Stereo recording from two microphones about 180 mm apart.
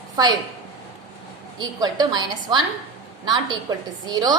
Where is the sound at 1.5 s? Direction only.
25° right (ahead or behind).